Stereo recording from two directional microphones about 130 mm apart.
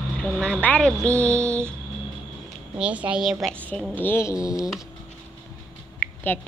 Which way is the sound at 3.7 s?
10° left (ahead or behind).